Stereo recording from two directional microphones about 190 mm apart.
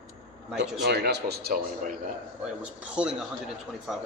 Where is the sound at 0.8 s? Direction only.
60° right (ahead or behind).